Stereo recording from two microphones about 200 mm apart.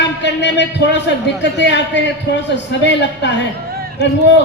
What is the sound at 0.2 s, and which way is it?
A man's voice, 60° left (ahead or behind).